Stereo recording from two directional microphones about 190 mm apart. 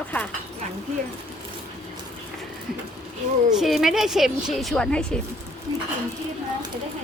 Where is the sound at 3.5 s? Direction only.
Centre (ahead or behind).